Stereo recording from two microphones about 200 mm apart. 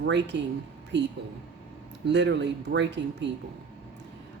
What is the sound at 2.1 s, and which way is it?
Speech, 60° right (ahead or behind).